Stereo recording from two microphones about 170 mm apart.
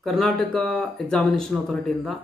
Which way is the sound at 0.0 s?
Centre (ahead or behind).